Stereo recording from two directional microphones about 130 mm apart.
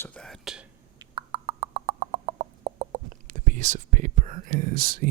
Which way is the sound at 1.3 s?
70° right (ahead or behind).